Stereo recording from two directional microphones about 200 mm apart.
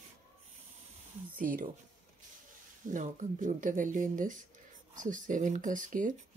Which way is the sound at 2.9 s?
40° right (ahead or behind).